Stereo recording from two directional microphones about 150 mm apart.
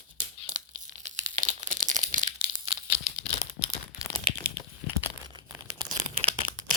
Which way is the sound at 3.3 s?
40° left (ahead or behind).